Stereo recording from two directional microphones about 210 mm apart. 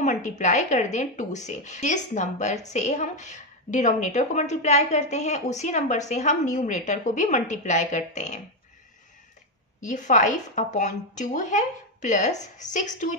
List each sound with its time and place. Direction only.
0.0 s a woman's voice: 35° left (ahead or behind)
9.8 s a woman's voice: 35° left (ahead or behind)